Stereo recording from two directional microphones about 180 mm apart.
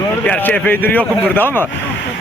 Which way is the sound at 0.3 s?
10° left (ahead or behind).